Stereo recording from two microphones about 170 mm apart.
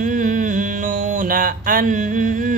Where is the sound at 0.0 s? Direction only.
50° right (ahead or behind).